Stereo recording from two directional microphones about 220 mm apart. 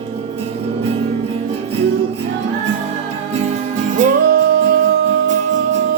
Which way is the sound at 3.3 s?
35° right (ahead or behind).